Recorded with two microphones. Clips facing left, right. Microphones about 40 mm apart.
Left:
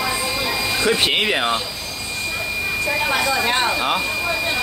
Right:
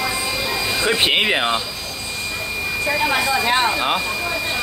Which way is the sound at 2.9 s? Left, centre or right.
Centre.